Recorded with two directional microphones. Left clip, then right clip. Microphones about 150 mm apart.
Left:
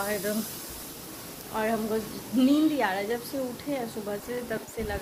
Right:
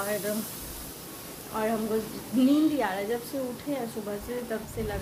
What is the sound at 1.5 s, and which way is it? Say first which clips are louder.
A woman's voice: even; 5° left (ahead or behind).